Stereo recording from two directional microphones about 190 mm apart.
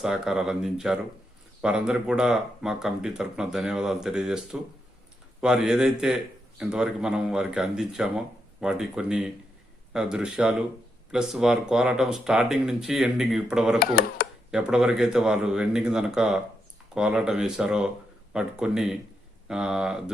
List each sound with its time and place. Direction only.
0.0 s speech: centre (ahead or behind)
13.7 s a sound: 50° left (ahead or behind)
14.5 s speech: 5° right (ahead or behind)